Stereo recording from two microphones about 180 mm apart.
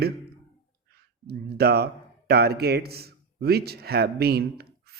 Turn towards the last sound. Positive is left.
turn(degrees=-60)  # may be behind; listen again after turning